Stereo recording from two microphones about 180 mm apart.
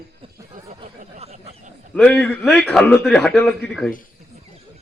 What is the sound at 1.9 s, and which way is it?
A man's voice, 5° left (ahead or behind).